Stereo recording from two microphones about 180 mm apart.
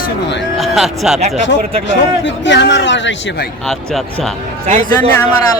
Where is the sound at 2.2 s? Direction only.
85° left.